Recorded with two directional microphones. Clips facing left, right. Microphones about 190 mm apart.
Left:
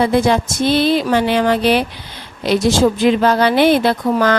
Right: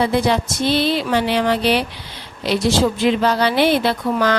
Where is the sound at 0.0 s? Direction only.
50° left (ahead or behind).